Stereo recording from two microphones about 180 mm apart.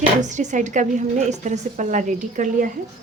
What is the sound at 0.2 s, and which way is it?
Speech, 40° right (ahead or behind).